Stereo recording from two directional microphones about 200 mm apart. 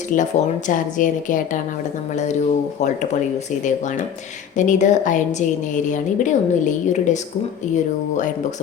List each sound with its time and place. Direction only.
0.1 s a woman's voice: 40° left (ahead or behind)
4.5 s a woman's voice: 40° left (ahead or behind)